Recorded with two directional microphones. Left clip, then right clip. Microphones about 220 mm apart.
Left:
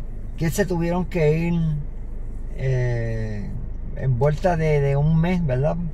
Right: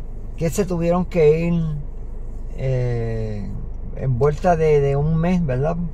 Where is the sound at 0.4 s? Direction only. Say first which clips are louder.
Right 2 dB; 30° right (ahead or behind).